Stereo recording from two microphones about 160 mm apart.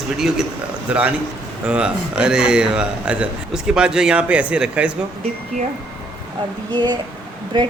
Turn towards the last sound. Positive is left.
turn(degrees=-30)  # may be behind; listen again after turning